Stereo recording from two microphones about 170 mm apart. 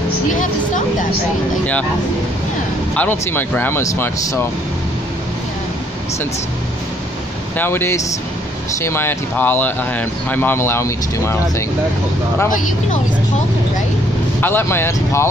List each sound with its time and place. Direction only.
0.3 s speech: 50° left (ahead or behind)
2.9 s speech: 10° left (ahead or behind)
7.5 s speech: 15° left (ahead or behind)
14.4 s speech: 15° left (ahead or behind)